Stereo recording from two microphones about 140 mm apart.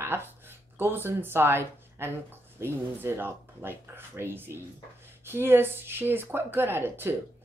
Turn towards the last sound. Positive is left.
turn(degrees=-15)  # may be behind; listen again after turning